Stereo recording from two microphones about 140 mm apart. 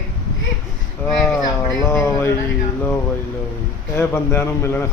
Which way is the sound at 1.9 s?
20° left (ahead or behind).